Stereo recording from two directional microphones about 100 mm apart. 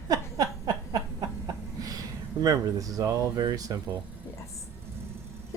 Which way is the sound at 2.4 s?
35° right (ahead or behind).